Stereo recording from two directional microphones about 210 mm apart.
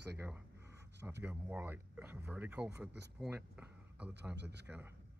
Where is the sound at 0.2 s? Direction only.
10° right (ahead or behind).